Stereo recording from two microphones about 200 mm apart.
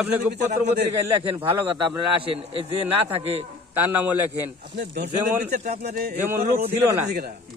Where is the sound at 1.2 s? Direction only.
30° right (ahead or behind).